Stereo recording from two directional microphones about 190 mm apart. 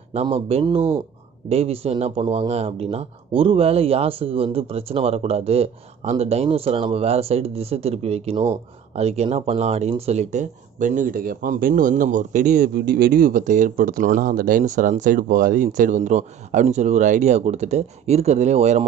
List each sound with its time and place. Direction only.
0.1 s speech: 30° right (ahead or behind)